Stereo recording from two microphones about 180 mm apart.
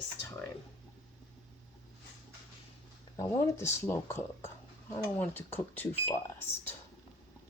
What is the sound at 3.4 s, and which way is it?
Speech, 15° left (ahead or behind).